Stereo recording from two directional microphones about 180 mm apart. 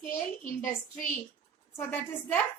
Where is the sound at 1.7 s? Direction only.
10° left (ahead or behind).